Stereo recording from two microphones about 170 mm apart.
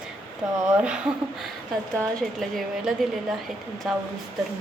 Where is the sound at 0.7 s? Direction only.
5° right (ahead or behind).